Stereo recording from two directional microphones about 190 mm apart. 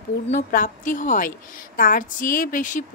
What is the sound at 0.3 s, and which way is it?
A woman's voice, 45° left (ahead or behind).